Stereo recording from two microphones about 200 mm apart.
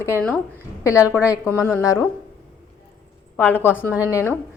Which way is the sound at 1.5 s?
15° left (ahead or behind).